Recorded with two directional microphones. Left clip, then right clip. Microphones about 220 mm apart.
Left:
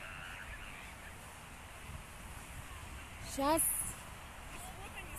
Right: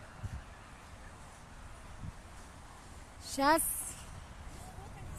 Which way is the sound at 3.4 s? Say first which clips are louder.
Right 5 dB; 15° right (ahead or behind).